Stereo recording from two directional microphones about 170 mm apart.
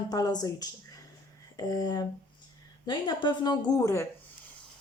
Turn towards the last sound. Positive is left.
turn(degrees=20)  # may be behind; listen again after turning